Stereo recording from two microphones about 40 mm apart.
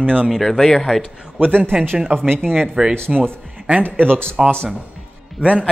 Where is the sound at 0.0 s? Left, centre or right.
Right.